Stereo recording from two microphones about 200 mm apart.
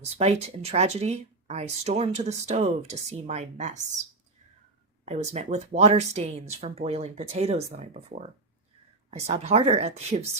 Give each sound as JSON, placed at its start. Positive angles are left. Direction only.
{"t": 0.0, "sound": "speech", "side_deg": -30}
{"t": 5.0, "sound": "speech", "side_deg": -35}